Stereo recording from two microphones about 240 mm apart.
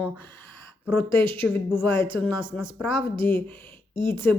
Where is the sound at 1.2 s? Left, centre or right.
Right.